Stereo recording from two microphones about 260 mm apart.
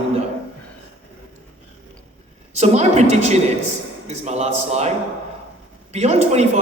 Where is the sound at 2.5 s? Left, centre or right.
Right.